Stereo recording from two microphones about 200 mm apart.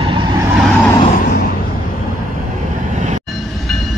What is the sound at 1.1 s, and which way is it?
Vehicle, 45° left (ahead or behind).